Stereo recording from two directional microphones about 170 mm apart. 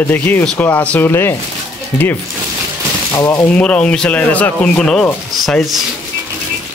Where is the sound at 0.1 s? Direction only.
10° left (ahead or behind).